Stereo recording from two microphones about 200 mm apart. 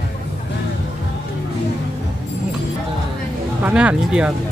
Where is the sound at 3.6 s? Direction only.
5° right (ahead or behind).